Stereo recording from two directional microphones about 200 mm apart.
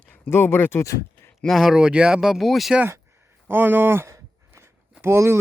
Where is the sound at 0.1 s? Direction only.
10° left (ahead or behind).